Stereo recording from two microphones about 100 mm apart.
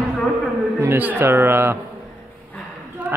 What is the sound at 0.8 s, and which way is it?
Speech, 20° right (ahead or behind).